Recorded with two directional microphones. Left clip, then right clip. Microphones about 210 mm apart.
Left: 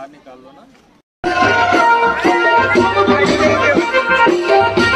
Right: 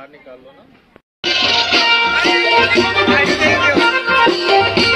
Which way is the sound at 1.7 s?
25° left (ahead or behind).